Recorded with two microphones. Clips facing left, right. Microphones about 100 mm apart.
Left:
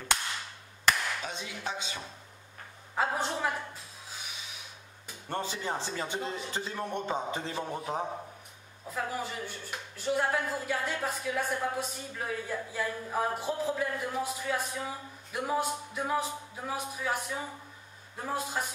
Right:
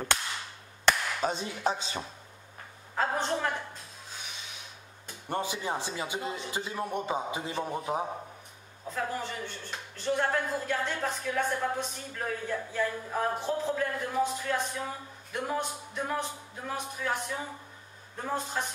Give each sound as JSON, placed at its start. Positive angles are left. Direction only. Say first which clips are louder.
{"t": 0.8, "sound": "speech", "louder": "right 3 dB", "side_deg": -35}
{"t": 3.0, "sound": "a woman's voice", "louder": "right 1 dB", "side_deg": 5}
{"t": 5.3, "sound": "a man's voice", "louder": "right 2 dB", "side_deg": -15}
{"t": 8.9, "sound": "speech", "louder": "right 1 dB", "side_deg": 5}